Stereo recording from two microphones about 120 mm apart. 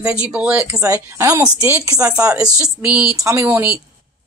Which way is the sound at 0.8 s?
25° right (ahead or behind).